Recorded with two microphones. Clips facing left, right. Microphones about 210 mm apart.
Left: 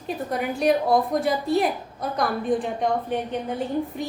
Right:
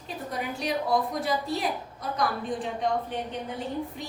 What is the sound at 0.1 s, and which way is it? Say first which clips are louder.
A woman's voice: left 7 dB; 55° left (ahead or behind).